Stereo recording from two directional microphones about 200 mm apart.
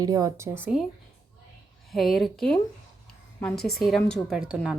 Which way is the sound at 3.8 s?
Centre (ahead or behind).